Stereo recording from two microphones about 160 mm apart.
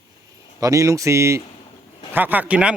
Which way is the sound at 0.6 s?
20° right (ahead or behind).